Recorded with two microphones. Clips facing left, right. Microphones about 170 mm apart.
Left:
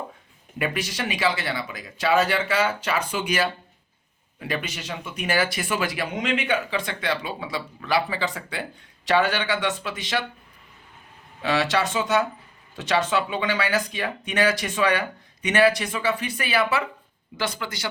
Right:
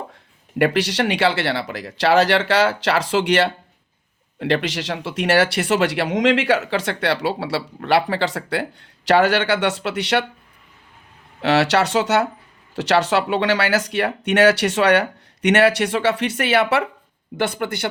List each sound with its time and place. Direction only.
0.6 s speech: 80° right
11.4 s speech: 75° right (ahead or behind)
17.3 s speech: 55° right (ahead or behind)